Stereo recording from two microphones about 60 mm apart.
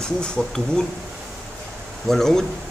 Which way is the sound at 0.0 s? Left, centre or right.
Centre.